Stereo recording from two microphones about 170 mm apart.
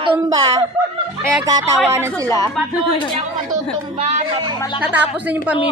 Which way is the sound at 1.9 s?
15° right (ahead or behind).